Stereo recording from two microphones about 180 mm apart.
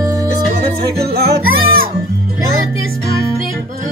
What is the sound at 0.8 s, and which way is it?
Music, 60° right (ahead or behind).